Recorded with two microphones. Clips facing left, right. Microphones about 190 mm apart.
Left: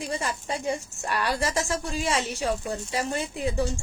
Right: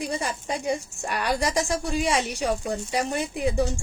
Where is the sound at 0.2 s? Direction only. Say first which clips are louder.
Right 1 dB; 15° right (ahead or behind).